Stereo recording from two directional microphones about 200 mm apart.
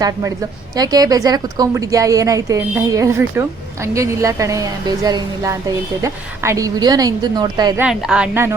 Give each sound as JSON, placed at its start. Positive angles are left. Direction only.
{"t": 0.8, "sound": "a woman's voice", "side_deg": -20}
{"t": 7.8, "sound": "a woman's voice", "side_deg": -5}